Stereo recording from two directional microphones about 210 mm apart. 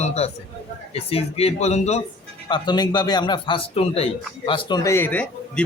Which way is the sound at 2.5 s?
20° left (ahead or behind).